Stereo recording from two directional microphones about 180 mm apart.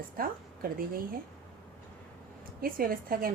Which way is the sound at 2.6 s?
55° right (ahead or behind).